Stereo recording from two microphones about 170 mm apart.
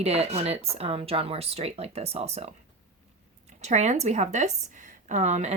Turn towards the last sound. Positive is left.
turn(degrees=-45)  # may be behind; listen again after turning